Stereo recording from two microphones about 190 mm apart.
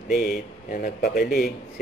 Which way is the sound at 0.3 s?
50° left (ahead or behind).